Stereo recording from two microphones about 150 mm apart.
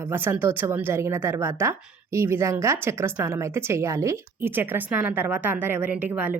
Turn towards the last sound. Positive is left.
turn(degrees=-10)  # may be behind; listen again after turning